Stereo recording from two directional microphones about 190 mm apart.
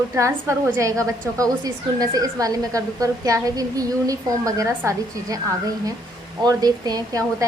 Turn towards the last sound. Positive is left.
turn(degrees=-20)  # may be behind; listen again after turning